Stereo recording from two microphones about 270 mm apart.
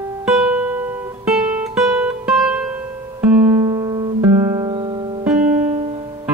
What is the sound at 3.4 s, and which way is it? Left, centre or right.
Music, centre.